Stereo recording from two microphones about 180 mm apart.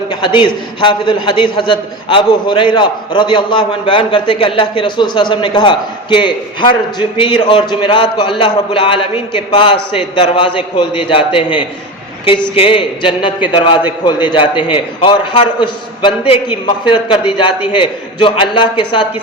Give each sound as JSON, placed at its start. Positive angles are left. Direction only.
{"t": 0.1, "sound": "a man's voice", "side_deg": 25}